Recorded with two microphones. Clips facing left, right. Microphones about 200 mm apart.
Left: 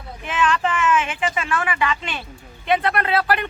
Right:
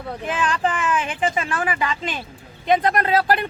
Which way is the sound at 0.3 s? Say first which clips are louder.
Left 2 dB; 35° right (ahead or behind).